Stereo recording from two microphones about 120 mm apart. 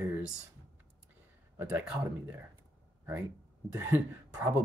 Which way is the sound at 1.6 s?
10° right (ahead or behind).